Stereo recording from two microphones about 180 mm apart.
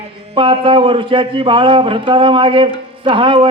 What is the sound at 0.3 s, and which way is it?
Speech, 30° right (ahead or behind).